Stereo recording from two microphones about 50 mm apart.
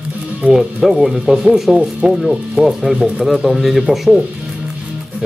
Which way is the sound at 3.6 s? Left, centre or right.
Centre.